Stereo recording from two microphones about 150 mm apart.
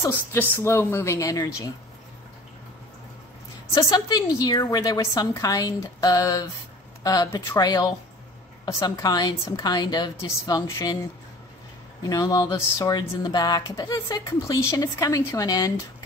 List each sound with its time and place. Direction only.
0.0 s a woman's voice: 20° left (ahead or behind)
3.7 s a woman's voice: 25° left (ahead or behind)
12.0 s a woman's voice: 25° left (ahead or behind)